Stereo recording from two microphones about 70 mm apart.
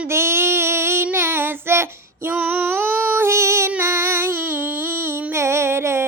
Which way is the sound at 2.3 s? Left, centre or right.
Right.